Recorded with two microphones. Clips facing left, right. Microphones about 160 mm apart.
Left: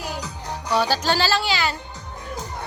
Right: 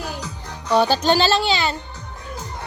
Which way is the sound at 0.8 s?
20° right (ahead or behind).